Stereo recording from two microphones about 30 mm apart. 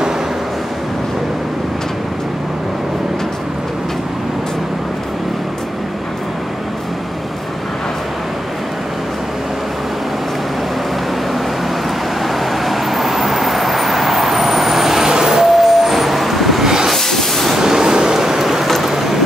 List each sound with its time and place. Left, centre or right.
12.6 s vehicle: centre
15.0 s vehicle: right; by 16.6 s centre
16.6 s train: centre
16.9 s hiss: centre
17.6 s a sound: right